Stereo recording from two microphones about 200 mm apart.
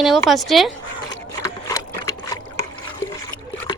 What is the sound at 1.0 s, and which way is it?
Trickle, 20° left (ahead or behind).